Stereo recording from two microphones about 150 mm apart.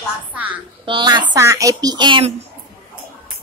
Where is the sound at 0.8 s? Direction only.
30° right (ahead or behind).